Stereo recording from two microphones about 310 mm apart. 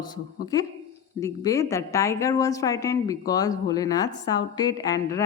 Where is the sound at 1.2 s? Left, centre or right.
Centre.